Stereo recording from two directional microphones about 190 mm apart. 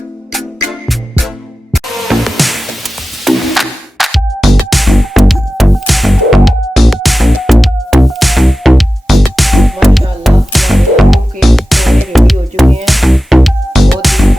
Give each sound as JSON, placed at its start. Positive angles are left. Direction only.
{"t": 0.3, "sound": "music", "side_deg": 0}